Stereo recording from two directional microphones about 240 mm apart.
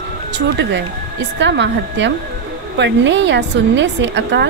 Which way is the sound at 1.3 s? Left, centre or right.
Right.